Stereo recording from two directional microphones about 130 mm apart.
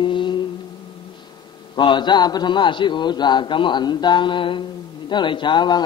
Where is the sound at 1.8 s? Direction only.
35° left (ahead or behind).